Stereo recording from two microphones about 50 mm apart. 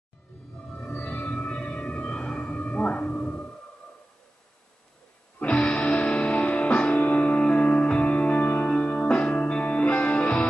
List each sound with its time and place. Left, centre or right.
0.6 s music: left
5.4 s music: left